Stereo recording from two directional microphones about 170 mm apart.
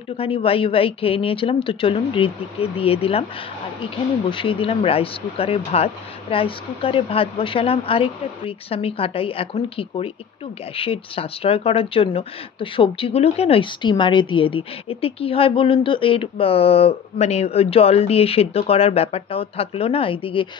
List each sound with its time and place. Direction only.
0.2 s speech: 35° left (ahead or behind)